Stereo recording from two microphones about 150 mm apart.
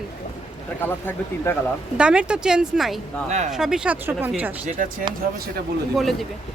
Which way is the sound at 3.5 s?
5° right (ahead or behind).